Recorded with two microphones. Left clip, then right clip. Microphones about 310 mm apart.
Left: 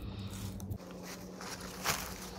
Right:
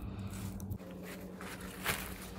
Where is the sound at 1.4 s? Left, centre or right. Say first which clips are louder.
Left 2 dB; centre.